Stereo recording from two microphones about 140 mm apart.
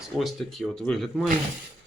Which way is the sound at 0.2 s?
Centre (ahead or behind).